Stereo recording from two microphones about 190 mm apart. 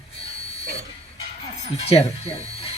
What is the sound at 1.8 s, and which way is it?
Speech, 30° left (ahead or behind).